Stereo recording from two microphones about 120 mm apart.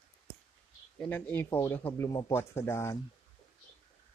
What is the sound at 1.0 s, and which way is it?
Speech, 15° left (ahead or behind).